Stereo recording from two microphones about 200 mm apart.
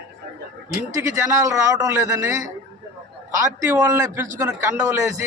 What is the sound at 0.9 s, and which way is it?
A man's voice, 15° right (ahead or behind).